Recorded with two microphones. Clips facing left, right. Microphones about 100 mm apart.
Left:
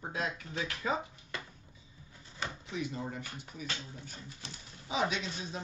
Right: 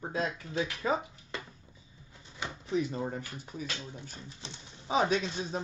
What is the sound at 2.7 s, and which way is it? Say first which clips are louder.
Speech: right 8 dB; 35° right (ahead or behind).